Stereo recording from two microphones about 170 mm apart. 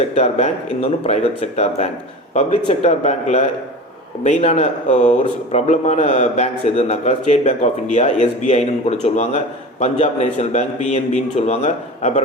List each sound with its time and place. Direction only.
0.0 s speech: 40° left (ahead or behind)